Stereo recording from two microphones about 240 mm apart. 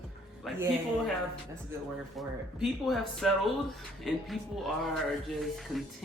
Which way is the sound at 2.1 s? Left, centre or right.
Centre.